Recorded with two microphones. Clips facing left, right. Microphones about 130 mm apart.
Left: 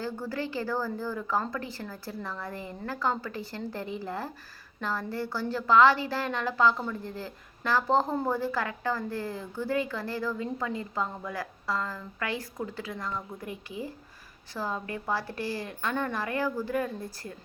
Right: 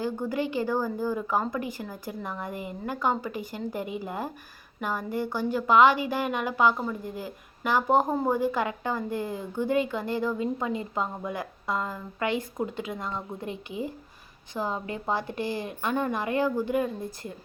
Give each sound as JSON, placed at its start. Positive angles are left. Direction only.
{"t": 0.0, "sound": "a woman's voice", "side_deg": -15}